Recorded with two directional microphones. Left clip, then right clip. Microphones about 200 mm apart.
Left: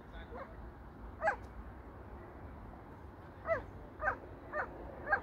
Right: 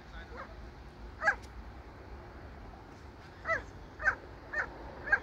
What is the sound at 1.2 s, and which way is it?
Dog, 55° left (ahead or behind).